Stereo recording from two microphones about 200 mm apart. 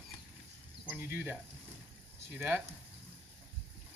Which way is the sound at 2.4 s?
10° right (ahead or behind).